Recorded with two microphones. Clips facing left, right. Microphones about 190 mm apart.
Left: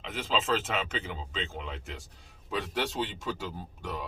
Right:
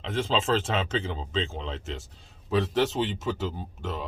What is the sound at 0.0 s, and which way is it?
Speech, 30° right (ahead or behind).